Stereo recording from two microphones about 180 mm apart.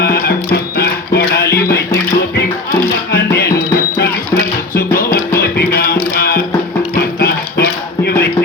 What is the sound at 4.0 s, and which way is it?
Music, 60° left (ahead or behind).